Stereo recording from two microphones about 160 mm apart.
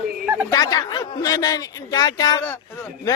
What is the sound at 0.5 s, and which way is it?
A man's voice, 20° left (ahead or behind).